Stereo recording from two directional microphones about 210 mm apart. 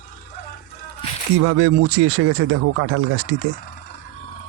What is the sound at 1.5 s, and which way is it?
Speech, 75° right (ahead or behind).